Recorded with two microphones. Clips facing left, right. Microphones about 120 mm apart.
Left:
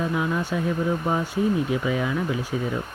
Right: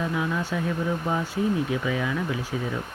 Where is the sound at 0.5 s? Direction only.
20° left (ahead or behind).